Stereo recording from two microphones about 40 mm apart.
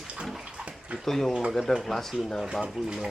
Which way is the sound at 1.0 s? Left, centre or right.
Centre.